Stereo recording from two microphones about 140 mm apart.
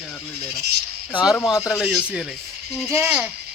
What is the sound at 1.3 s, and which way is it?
Speech, 20° left (ahead or behind).